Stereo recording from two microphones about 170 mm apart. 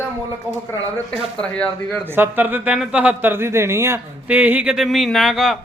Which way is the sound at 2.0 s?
10° right (ahead or behind).